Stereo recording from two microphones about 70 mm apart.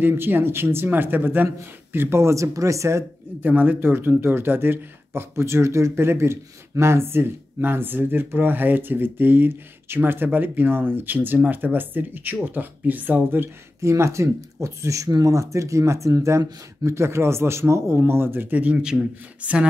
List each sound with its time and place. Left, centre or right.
0.0 s speech: right
3.3 s speech: right
13.7 s speech: right; by 19.7 s centre